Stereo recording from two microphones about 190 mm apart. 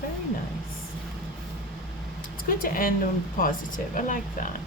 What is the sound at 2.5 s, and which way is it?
Speech, 50° left (ahead or behind).